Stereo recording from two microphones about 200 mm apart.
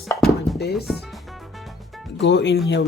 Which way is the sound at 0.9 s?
Centre (ahead or behind).